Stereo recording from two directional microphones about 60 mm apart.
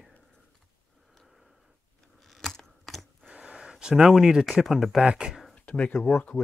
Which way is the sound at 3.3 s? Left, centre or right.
Centre.